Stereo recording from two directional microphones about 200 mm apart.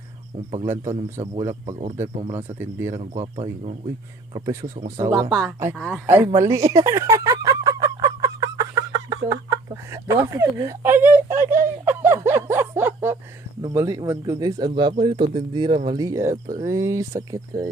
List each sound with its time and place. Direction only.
0.5 s speech: 15° right (ahead or behind)
1.6 s speech: 35° right (ahead or behind)
2.6 s speech: 15° right (ahead or behind)
4.4 s speech: 20° right (ahead or behind)
16.3 s speech: 35° right (ahead or behind)
16.6 s speech: 15° right (ahead or behind)